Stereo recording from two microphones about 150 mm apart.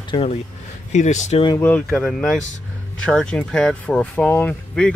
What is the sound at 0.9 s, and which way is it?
Speech, 50° left (ahead or behind).